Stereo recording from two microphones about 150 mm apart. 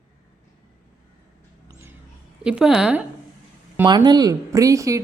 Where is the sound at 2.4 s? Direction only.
5° right (ahead or behind).